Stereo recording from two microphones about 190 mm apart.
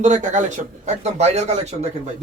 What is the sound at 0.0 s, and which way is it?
Speech, 40° right (ahead or behind).